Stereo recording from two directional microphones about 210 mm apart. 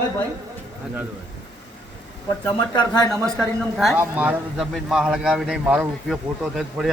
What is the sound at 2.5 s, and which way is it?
Speech, 20° left (ahead or behind).